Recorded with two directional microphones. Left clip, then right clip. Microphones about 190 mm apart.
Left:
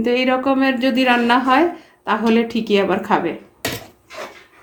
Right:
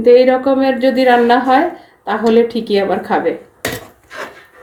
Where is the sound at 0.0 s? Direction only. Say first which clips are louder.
Right 9 dB; 40° left (ahead or behind).